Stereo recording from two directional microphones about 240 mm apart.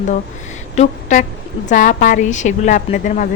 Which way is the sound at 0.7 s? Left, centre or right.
Left.